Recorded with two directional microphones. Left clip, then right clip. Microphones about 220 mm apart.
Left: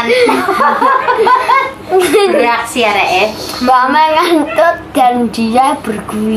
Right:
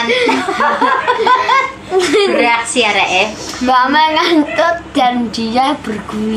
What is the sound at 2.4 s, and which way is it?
Speech, 30° right (ahead or behind).